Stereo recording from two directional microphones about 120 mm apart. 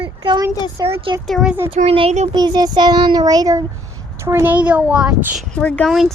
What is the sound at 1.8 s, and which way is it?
Speech, 90° right.